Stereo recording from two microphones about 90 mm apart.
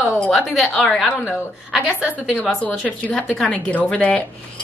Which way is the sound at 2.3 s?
15° left (ahead or behind).